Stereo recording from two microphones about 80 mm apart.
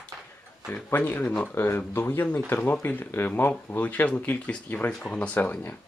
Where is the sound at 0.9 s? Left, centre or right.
Left.